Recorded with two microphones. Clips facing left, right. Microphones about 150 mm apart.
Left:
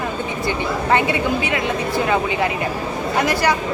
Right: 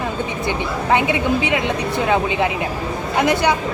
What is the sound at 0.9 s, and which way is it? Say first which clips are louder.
A woman's voice: right 2 dB; 15° right (ahead or behind).